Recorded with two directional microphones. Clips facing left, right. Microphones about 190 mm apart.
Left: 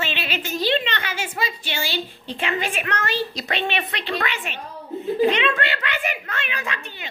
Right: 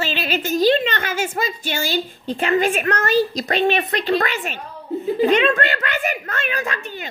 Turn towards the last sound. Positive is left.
turn(degrees=-45)  # may be behind; listen again after turning